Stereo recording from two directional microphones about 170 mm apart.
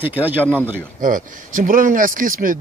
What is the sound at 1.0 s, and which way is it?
Speech, 50° right (ahead or behind).